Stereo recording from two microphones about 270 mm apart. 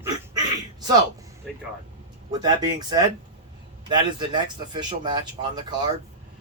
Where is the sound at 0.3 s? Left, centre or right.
Centre.